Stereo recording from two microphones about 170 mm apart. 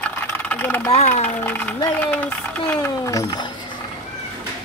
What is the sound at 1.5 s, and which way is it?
Speech, 10° left (ahead or behind).